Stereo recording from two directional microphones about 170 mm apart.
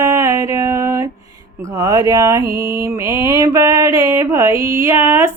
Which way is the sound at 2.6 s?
15° right (ahead or behind).